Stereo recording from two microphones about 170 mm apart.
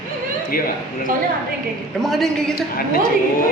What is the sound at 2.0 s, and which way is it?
Speech, centre (ahead or behind).